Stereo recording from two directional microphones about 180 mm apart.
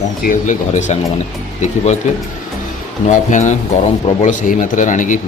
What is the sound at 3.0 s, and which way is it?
Speech, 40° left (ahead or behind).